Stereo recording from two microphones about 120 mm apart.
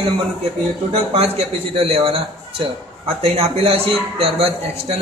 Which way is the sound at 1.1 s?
55° right (ahead or behind).